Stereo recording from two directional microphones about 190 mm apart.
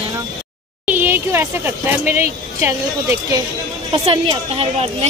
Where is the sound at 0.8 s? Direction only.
10° right (ahead or behind).